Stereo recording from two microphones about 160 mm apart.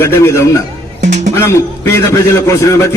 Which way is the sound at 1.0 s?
45° right (ahead or behind).